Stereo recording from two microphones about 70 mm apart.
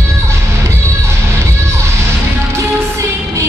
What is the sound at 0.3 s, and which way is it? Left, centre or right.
Music, right.